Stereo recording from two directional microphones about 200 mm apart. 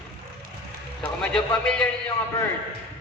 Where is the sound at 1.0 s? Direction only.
5° left (ahead or behind).